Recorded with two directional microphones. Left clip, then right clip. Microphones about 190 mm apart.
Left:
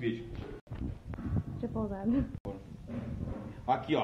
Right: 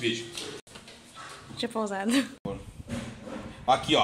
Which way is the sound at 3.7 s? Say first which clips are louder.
Right 7 dB; 50° right (ahead or behind).